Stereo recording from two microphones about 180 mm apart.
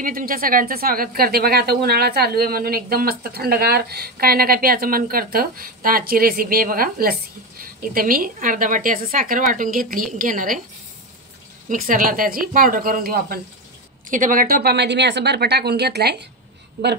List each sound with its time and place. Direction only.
0.0 s speech: 50° right (ahead or behind)
11.7 s a woman's voice: 50° right (ahead or behind); by 16.3 s 65° right (ahead or behind)